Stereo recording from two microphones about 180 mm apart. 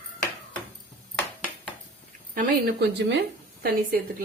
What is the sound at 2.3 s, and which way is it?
A woman's voice, 50° right (ahead or behind).